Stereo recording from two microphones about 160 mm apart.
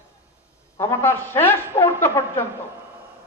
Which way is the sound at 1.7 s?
35° left (ahead or behind).